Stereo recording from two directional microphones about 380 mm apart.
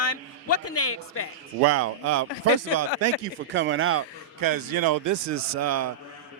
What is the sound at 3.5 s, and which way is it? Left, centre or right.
Speech, right.